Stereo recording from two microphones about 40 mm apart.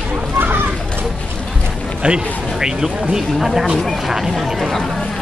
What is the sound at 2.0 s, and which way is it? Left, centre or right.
Speech, right.